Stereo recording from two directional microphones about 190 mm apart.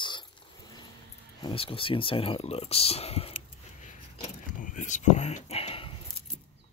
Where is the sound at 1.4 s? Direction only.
30° left (ahead or behind).